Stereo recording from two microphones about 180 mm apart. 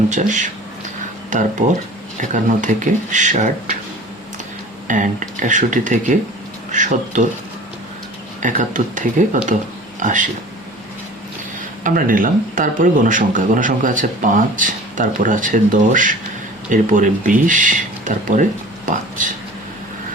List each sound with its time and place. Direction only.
0.1 s speech: 45° right (ahead or behind)
4.9 s speech: 45° right (ahead or behind)
8.4 s speech: 45° right (ahead or behind)
11.8 s speech: 50° right (ahead or behind)